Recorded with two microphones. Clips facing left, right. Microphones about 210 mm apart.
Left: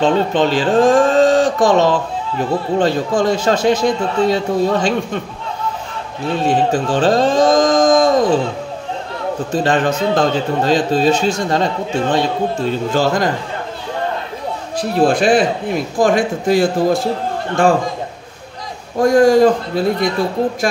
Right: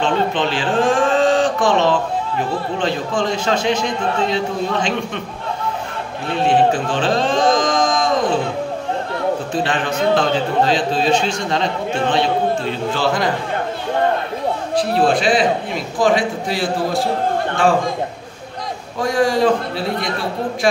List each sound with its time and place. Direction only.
0.0 s a man's voice: 40° left (ahead or behind)
6.4 s speech: 40° left (ahead or behind)
9.5 s a man's voice: 45° left (ahead or behind)
14.8 s a man's voice: 50° left (ahead or behind)
18.9 s a man's voice: 45° left (ahead or behind)